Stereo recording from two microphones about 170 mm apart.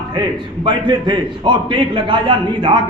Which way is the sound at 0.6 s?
30° right (ahead or behind).